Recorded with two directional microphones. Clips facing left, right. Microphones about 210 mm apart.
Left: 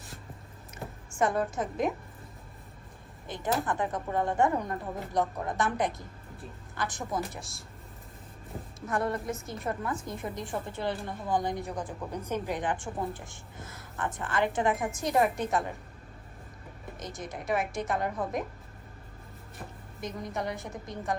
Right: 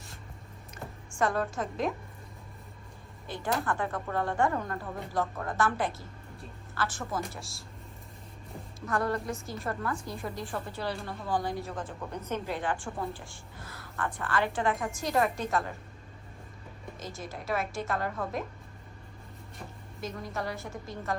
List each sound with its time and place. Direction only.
1.2 s a woman's voice: 20° left (ahead or behind)
3.2 s a woman's voice: 20° left (ahead or behind)
8.9 s a woman's voice: 20° left (ahead or behind)
17.0 s a woman's voice: 15° left (ahead or behind)
20.0 s a woman's voice: 20° left (ahead or behind)